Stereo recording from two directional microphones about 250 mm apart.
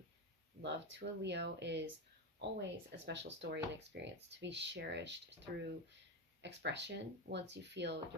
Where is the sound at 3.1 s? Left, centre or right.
Right.